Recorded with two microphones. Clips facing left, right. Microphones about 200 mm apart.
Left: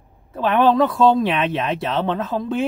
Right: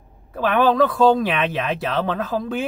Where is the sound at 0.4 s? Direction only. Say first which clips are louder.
Left 1 dB; 30° left (ahead or behind).